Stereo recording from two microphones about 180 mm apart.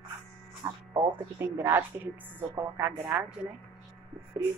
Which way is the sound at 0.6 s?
15° right (ahead or behind).